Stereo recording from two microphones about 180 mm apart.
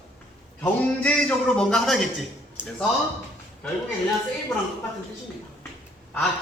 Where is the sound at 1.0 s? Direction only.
5° left (ahead or behind).